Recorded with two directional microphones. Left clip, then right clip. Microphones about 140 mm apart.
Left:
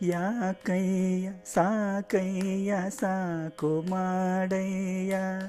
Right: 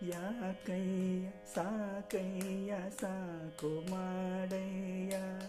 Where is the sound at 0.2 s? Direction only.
50° left (ahead or behind).